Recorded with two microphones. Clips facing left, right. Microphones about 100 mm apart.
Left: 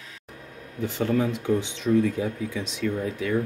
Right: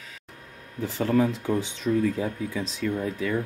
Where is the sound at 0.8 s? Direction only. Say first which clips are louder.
Right 1 dB; 35° right (ahead or behind).